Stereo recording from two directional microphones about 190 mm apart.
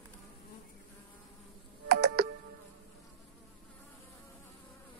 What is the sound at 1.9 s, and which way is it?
Computer keyboard, 60° right (ahead or behind).